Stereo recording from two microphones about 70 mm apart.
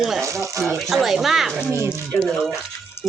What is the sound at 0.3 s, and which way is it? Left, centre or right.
Speech, right.